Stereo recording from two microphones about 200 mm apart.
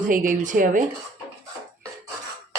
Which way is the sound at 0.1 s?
40° right (ahead or behind).